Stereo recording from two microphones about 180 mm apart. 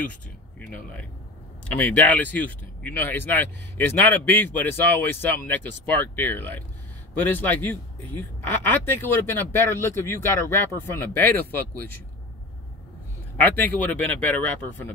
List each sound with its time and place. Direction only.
0.6 s a man's voice: 5° left (ahead or behind)
13.4 s a man's voice: 10° left (ahead or behind)